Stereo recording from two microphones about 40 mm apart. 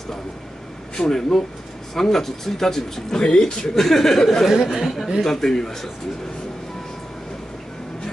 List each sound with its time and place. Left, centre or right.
0.9 s speech: centre
3.2 s speech: left
4.5 s speech: centre
4.8 s speech: centre